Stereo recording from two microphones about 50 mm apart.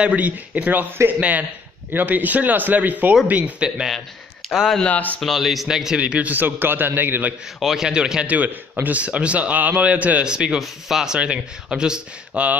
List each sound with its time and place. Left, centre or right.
0.0 s speech: right
1.9 s a man's voice: right; by 3.9 s centre
4.4 s a sound: centre
4.7 s speech: left
5.2 s speech: centre
5.9 s a man's voice: right
6.3 s speech: right
7.6 s speech: centre
7.9 s speech: centre
8.8 s a man's voice: right
10.2 s speech: centre
12.4 s a man's voice: right